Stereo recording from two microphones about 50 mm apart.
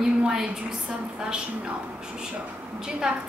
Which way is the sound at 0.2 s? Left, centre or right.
Centre.